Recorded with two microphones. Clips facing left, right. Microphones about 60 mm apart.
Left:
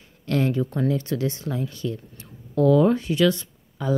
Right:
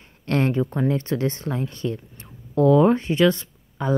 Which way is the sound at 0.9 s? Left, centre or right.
Right.